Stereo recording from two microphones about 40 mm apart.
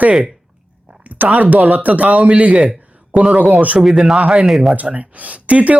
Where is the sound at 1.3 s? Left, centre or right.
Right.